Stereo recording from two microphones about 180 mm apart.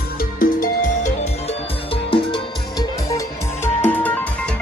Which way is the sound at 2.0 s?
25° left (ahead or behind).